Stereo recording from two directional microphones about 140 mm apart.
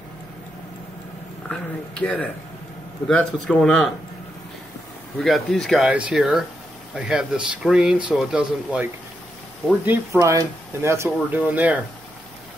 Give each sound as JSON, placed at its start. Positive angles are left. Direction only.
{"t": 1.5, "sound": "speech", "side_deg": 10}
{"t": 5.2, "sound": "speech", "side_deg": 0}
{"t": 9.8, "sound": "speech", "side_deg": -20}